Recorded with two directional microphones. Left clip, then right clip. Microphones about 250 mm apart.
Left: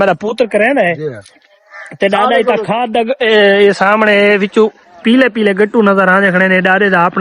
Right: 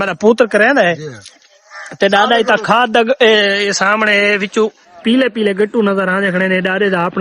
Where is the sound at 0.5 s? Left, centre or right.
Centre.